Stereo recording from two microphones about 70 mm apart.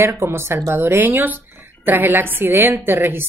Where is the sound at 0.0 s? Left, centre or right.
Right.